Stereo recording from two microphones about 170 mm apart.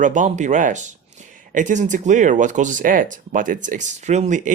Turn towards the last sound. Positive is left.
turn(degrees=-45)  # may be behind; listen again after turning